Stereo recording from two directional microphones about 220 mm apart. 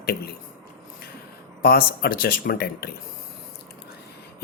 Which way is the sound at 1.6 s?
45° left (ahead or behind).